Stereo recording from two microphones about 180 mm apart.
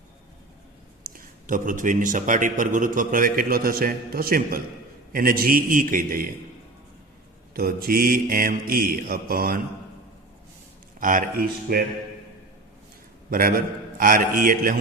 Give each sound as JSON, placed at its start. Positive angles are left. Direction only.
{"t": 1.0, "sound": "a man's voice", "side_deg": -50}
{"t": 7.5, "sound": "a man's voice", "side_deg": -55}
{"t": 11.0, "sound": "a man's voice", "side_deg": -50}
{"t": 13.3, "sound": "a man's voice", "side_deg": -55}